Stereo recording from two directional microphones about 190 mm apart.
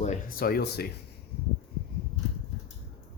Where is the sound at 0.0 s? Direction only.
45° left (ahead or behind).